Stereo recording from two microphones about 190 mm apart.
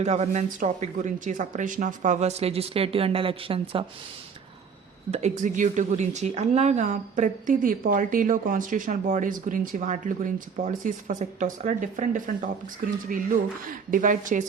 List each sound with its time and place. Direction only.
0.0 s a woman's voice: 35° right (ahead or behind)
5.1 s a woman's voice: 40° right (ahead or behind)